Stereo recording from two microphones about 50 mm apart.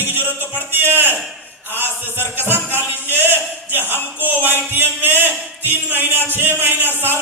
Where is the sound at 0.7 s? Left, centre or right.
Right.